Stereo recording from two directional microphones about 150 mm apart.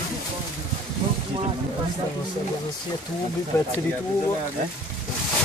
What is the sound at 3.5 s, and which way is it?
Speech, 20° left (ahead or behind).